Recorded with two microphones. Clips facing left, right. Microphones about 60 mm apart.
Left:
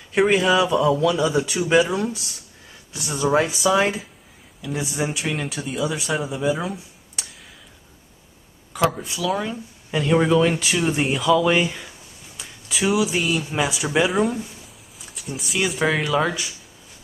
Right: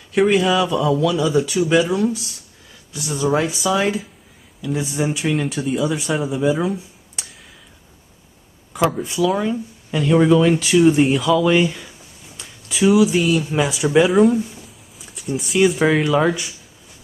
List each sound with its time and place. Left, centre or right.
0.1 s speech: centre
2.9 s speech: left
3.3 s speech: centre
4.7 s speech: centre
5.3 s speech: centre
8.9 s speech: centre
9.8 s speech: centre